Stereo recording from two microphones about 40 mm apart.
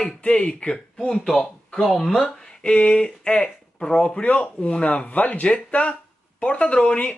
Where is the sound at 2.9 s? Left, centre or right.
Centre.